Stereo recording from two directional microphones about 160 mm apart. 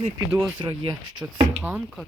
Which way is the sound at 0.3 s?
25° right (ahead or behind).